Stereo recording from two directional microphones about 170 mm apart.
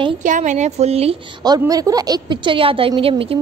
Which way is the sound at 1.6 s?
20° right (ahead or behind).